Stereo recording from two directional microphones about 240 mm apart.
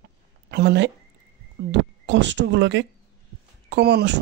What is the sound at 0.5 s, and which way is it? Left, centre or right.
Speech, right.